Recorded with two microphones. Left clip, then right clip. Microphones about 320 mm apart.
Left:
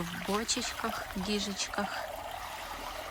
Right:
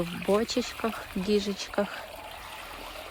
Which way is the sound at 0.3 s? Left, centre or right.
Centre.